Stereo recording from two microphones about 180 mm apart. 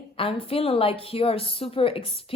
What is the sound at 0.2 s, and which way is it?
Speech, 30° left (ahead or behind).